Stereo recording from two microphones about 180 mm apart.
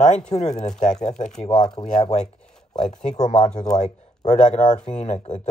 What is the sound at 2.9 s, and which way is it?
Speech, 40° left (ahead or behind).